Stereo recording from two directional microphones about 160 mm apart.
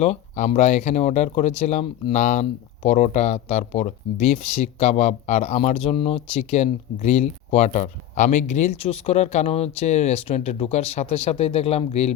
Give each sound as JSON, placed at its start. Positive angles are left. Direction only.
{"t": 0.0, "sound": "speech", "side_deg": 45}